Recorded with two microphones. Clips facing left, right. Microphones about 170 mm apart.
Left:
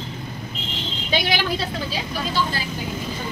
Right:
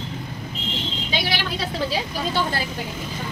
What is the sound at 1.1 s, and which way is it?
Vehicle, 50° left (ahead or behind).